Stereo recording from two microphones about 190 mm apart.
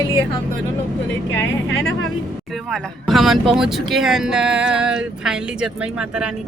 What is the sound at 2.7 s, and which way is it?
Speech, centre (ahead or behind).